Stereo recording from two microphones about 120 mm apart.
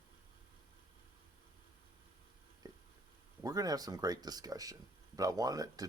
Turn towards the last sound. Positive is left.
turn(degrees=-30)  # may be behind; listen again after turning